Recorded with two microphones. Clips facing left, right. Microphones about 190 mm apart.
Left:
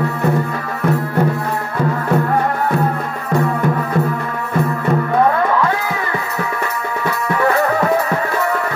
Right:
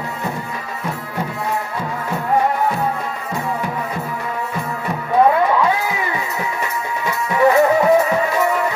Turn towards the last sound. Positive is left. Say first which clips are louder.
# right 3 dB
turn(degrees=-15)  # may be behind; listen again after turning